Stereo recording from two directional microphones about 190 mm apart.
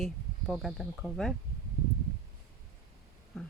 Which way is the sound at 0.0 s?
Centre (ahead or behind).